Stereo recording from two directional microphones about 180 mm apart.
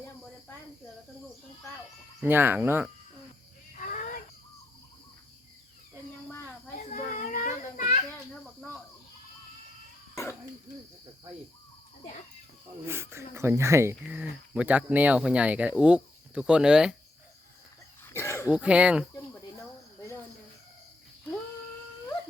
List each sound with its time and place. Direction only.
2.2 s speech: 10° right (ahead or behind)
3.8 s a sound: 50° left (ahead or behind)
6.7 s children playing: 45° left (ahead or behind)
12.8 s speech: 15° right (ahead or behind)
18.0 s cough: 15° left (ahead or behind)
18.5 s speech: 5° right (ahead or behind)